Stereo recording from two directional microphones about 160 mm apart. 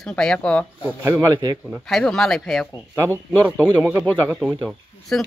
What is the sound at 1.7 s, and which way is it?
Speech, centre (ahead or behind).